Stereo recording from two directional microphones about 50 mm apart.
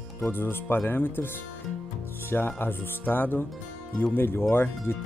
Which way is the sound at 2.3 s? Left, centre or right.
Left.